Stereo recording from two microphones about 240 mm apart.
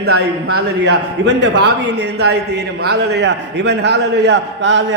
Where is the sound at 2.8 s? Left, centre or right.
Right.